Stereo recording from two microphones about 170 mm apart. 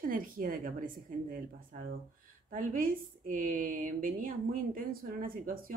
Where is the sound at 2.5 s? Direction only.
55° right (ahead or behind).